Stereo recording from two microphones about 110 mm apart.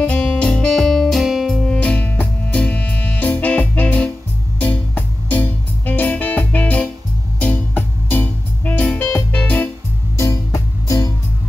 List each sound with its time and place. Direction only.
0.0 s music: 10° left (ahead or behind)
1.6 s music: 10° left (ahead or behind)
10.1 s music: 25° left (ahead or behind)